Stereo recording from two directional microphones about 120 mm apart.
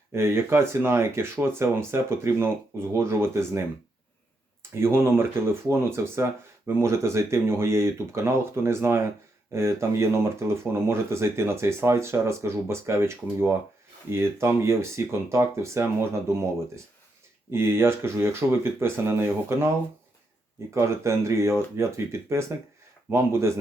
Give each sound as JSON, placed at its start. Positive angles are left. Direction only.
{"t": 0.1, "sound": "speech", "side_deg": -20}
{"t": 4.8, "sound": "speech", "side_deg": -20}
{"t": 17.5, "sound": "speech", "side_deg": -20}
{"t": 20.7, "sound": "speech", "side_deg": -25}